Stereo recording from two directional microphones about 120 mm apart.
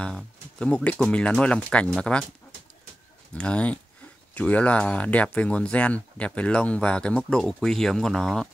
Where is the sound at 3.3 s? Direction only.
10° left (ahead or behind).